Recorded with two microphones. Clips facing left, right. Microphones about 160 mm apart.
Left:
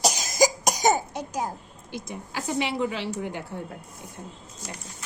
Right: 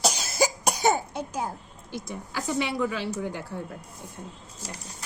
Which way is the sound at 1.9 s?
20° left (ahead or behind).